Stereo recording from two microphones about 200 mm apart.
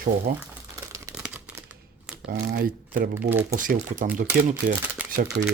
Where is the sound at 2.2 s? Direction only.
50° right (ahead or behind).